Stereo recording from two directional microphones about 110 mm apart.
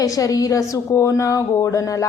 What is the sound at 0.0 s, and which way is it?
A woman's voice, 30° left (ahead or behind).